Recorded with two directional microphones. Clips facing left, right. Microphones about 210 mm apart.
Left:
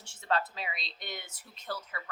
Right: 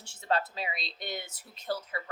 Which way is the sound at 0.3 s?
35° right (ahead or behind).